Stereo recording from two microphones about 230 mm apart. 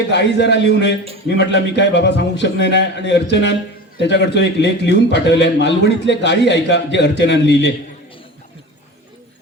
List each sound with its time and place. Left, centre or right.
0.1 s a man's voice: left